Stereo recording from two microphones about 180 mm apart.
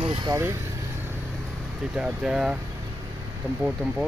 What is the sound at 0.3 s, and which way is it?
Speech, 15° right (ahead or behind).